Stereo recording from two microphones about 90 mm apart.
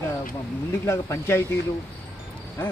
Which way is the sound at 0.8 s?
30° left (ahead or behind).